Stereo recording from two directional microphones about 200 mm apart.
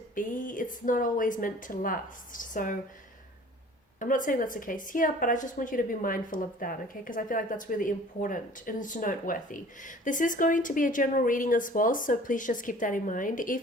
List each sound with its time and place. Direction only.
0.2 s speech: 40° left (ahead or behind)
4.0 s a woman's voice: 40° left (ahead or behind)